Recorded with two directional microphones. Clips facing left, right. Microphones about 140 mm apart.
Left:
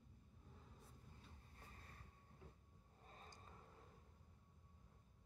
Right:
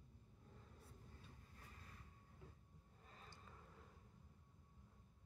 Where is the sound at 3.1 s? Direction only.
40° left (ahead or behind).